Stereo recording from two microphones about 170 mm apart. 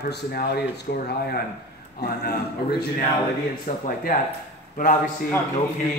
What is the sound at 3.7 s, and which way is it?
Speech, 50° left (ahead or behind).